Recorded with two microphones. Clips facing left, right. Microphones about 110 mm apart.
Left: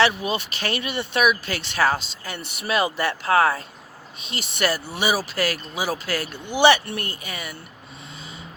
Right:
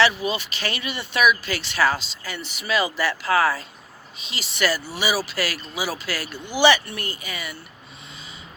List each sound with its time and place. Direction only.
0.0 s speech: 50° left (ahead or behind)